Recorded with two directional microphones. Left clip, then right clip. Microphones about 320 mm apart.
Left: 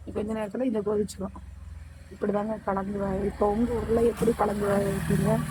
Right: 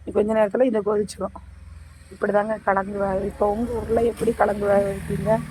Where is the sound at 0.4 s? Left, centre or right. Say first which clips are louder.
Right 11 dB; centre.